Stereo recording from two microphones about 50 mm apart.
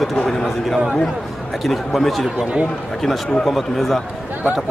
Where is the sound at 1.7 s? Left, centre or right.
Centre.